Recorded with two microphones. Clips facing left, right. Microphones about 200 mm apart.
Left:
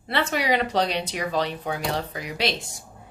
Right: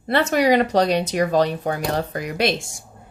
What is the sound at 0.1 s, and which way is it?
A woman's voice, 45° right (ahead or behind).